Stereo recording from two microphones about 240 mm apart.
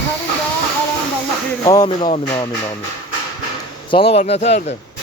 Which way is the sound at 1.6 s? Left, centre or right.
Centre.